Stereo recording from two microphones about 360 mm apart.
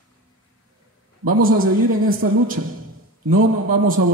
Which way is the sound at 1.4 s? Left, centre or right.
Right.